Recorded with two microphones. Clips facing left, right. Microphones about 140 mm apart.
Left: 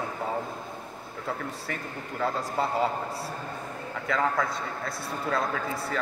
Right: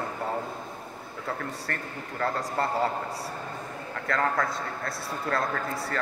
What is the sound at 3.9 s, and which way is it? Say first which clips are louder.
A man's voice: even; centre (ahead or behind).